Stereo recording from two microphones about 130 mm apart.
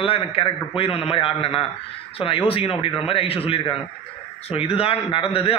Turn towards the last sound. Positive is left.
turn(degrees=50)  # may be behind; listen again after turning